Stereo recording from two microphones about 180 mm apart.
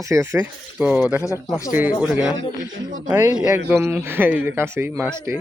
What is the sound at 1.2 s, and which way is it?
Speech, 15° left (ahead or behind).